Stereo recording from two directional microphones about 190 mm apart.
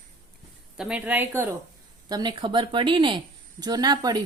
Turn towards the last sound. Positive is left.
turn(degrees=-20)  # may be behind; listen again after turning